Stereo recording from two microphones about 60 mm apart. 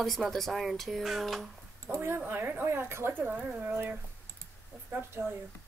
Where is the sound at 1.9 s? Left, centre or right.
Right.